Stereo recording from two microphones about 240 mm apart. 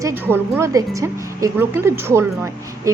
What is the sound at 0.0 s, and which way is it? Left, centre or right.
A woman's voice, centre.